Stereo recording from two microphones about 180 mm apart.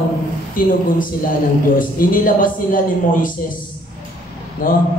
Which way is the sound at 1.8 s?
50° left (ahead or behind).